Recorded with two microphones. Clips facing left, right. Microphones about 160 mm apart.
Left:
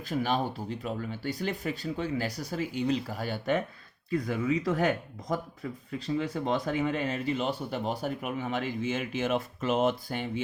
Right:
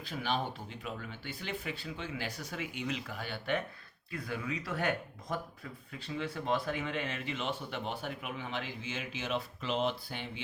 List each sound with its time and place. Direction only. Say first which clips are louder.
0.0 s speech: left 6 dB; 45° left (ahead or behind)